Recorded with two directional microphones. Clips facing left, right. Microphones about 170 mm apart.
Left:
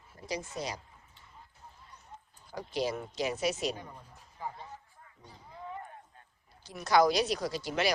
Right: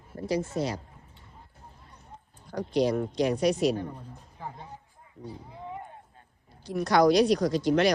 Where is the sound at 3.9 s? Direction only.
20° right (ahead or behind).